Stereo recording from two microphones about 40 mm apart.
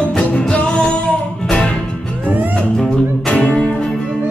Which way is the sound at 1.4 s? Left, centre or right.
Left.